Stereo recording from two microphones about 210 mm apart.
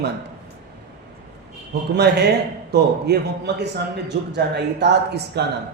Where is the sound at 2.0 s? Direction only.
50° right (ahead or behind).